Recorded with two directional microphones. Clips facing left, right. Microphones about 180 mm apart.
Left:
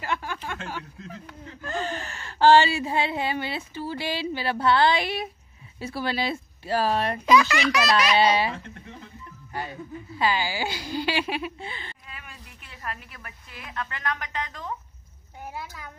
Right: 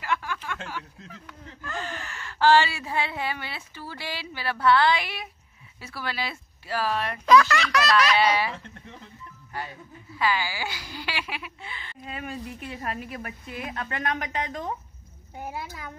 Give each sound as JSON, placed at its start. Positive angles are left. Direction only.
{"t": 0.0, "sound": "a sound", "side_deg": 30}
{"t": 1.6, "sound": "speech", "side_deg": 25}
{"t": 7.2, "sound": "a child's voice", "side_deg": 10}
{"t": 7.8, "sound": "speech", "side_deg": 20}
{"t": 10.1, "sound": "speech", "side_deg": 25}
{"t": 12.1, "sound": "a woman's voice", "side_deg": -25}